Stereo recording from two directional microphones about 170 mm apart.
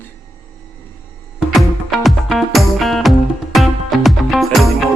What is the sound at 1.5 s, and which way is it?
Music, centre (ahead or behind).